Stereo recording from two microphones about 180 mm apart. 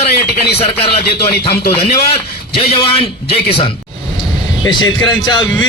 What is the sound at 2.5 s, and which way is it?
Speech, 30° left (ahead or behind).